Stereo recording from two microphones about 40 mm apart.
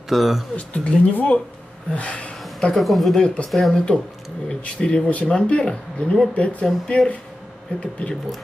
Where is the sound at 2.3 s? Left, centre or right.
Centre.